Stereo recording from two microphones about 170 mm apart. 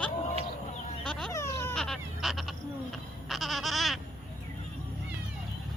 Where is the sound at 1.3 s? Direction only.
15° left (ahead or behind).